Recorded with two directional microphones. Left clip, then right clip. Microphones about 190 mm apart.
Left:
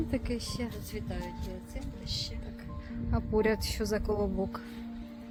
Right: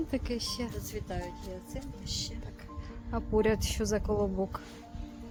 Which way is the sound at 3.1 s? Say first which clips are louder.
Right 1 dB; centre (ahead or behind).